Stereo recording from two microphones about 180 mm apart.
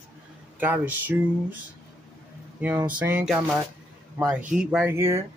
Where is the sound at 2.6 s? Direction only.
10° right (ahead or behind).